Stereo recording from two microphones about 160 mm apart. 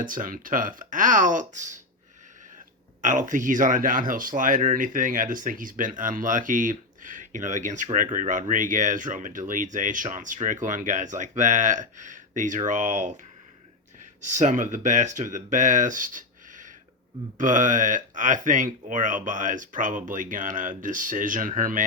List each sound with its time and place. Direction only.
0.0 s speech: 55° right (ahead or behind)
3.0 s speech: 55° right (ahead or behind)
14.3 s speech: 50° right (ahead or behind)